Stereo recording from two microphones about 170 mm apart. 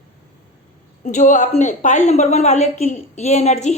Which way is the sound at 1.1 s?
50° left (ahead or behind).